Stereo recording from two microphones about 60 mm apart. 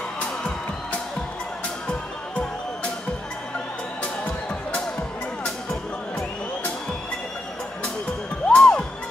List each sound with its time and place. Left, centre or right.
1.9 s music: centre
4.0 s music: left
5.4 s music: centre
8.5 s music: centre